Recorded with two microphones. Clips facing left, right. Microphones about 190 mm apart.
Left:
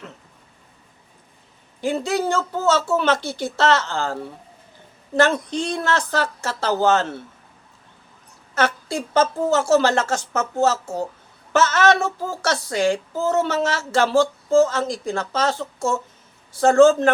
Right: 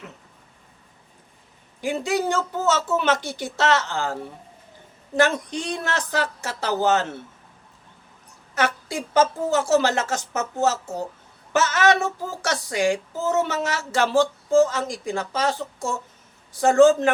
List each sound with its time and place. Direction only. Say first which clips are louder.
1.8 s speech: left 2 dB; 15° right (ahead or behind)
9.1 s speech: left 1 dB; 15° right (ahead or behind)